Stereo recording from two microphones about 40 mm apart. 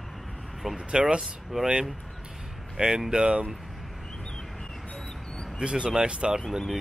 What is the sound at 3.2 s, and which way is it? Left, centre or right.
Speech, right.